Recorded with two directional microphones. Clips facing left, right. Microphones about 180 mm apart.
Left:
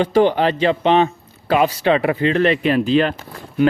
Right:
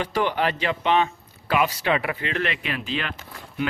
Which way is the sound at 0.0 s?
30° left (ahead or behind).